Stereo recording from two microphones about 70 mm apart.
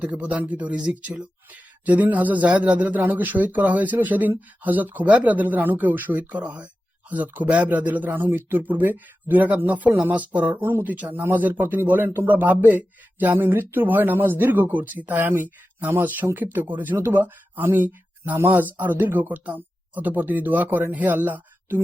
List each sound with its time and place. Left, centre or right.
0.0 s speech: right